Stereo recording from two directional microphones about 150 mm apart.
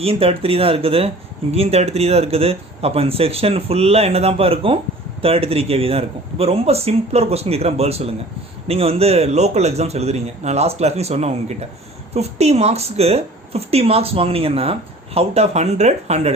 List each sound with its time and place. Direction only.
0.0 s a woman's voice: 40° right (ahead or behind)